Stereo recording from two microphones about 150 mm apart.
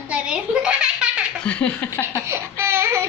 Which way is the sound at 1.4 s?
10° left (ahead or behind).